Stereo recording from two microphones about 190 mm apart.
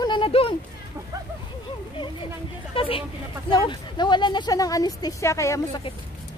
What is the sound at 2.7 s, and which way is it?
A woman's voice, 30° left (ahead or behind).